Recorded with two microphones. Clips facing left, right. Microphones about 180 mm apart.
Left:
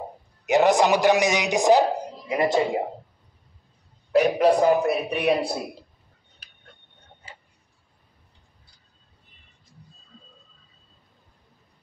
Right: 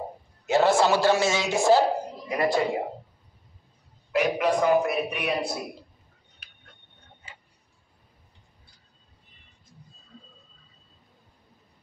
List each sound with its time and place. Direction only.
0.5 s a man's voice: 15° left (ahead or behind)
4.1 s a man's voice: 35° left (ahead or behind)